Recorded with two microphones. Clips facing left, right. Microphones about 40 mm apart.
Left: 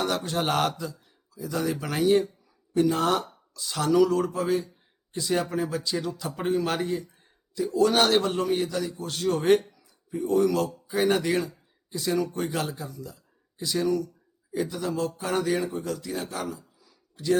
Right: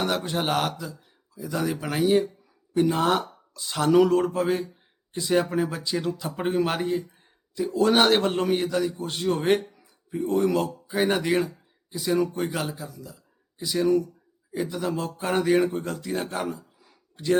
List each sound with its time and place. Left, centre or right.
0.0 s speech: right
0.4 s speech: centre
2.8 s speech: centre
3.9 s speech: right
5.1 s a man's voice: right
11.4 s a sound: centre
12.4 s speech: centre
13.8 s speech: right
14.5 s speech: centre
14.8 s a sound: right